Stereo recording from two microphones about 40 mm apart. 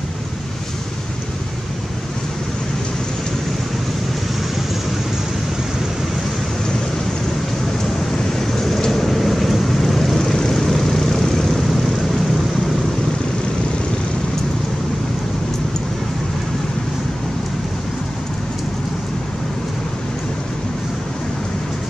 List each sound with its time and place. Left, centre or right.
8.3 s vehicle: centre
10.1 s vehicle: centre